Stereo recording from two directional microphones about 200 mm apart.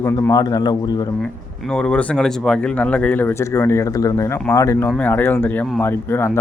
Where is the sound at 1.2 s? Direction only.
5° left (ahead or behind).